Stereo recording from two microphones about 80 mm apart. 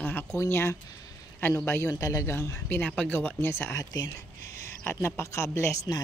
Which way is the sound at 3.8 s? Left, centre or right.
Left.